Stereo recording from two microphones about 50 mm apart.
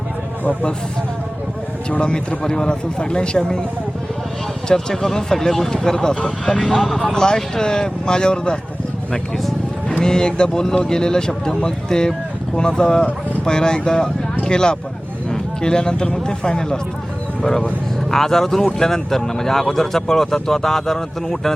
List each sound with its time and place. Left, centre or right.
1.9 s speech: centre
4.7 s speech: centre
7.1 s speech: centre
10.0 s speech: centre
18.1 s speech: centre